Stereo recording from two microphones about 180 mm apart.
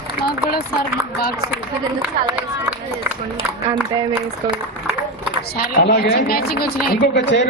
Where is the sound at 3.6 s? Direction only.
20° right (ahead or behind).